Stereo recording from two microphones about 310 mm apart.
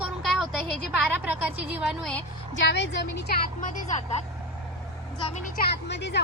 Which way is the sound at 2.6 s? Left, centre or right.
Left.